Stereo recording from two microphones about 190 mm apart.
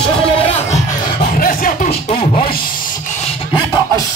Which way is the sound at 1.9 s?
30° left (ahead or behind).